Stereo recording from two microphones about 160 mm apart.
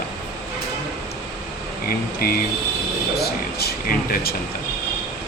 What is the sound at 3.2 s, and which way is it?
Speech, 80° left.